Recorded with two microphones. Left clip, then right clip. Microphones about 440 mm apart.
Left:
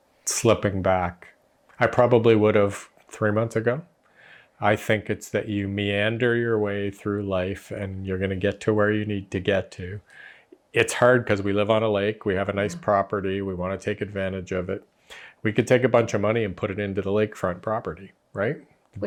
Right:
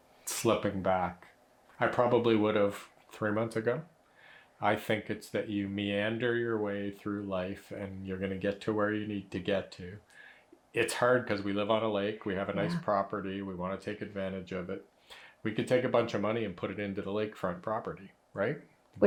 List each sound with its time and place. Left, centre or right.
0.4 s speech: left